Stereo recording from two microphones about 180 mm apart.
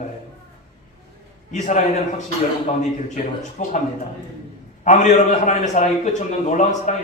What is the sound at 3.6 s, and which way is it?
Speech, 45° left (ahead or behind).